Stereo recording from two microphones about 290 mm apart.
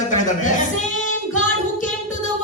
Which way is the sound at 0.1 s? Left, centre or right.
Left.